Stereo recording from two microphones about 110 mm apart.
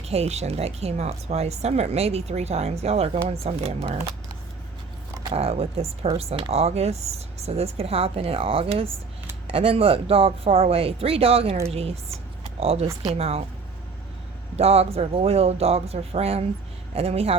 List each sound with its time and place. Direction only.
0.0 s speech: 70° right (ahead or behind)
5.3 s speech: 65° right (ahead or behind)
14.5 s speech: 70° right (ahead or behind)